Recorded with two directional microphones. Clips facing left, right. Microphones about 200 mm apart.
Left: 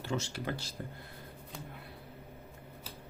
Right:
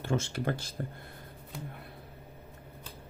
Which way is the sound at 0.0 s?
50° right (ahead or behind).